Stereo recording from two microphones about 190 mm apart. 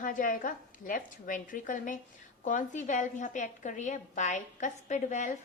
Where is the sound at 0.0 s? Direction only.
45° left (ahead or behind).